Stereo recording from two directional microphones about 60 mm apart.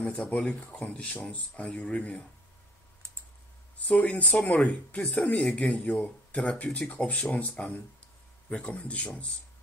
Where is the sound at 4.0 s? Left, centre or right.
Left.